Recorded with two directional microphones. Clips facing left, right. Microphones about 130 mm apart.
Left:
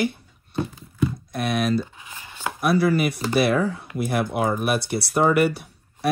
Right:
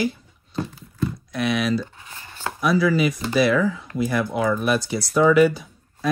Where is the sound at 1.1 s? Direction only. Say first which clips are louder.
Right 1 dB; 50° left (ahead or behind).